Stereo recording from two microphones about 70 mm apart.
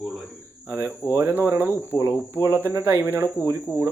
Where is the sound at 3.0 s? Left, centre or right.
Right.